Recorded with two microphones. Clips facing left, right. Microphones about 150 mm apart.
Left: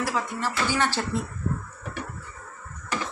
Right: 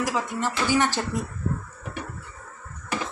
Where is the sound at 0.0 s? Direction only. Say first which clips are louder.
Right 2 dB; 15° right (ahead or behind).